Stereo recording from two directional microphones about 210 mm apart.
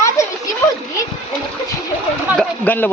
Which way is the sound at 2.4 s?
10° left (ahead or behind).